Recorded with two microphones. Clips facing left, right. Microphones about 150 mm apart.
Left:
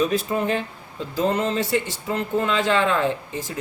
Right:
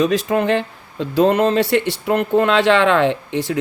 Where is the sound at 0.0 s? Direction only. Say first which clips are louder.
Right 5 dB; 90° right.